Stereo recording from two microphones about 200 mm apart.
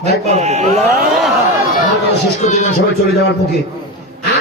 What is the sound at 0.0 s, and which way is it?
Speech, 35° right (ahead or behind).